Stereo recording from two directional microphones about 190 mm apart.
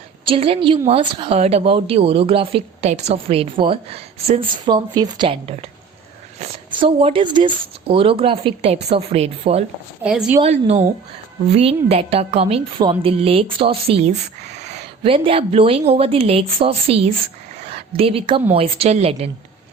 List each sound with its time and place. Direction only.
0.3 s a woman's voice: 30° right (ahead or behind)
6.7 s a woman's voice: 25° right (ahead or behind)
10.0 s a woman's voice: 5° right (ahead or behind)
10.4 s a woman's voice: 35° right (ahead or behind)